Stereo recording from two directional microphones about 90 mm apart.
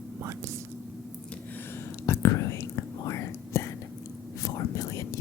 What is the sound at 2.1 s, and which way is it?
Whispering, 35° left (ahead or behind).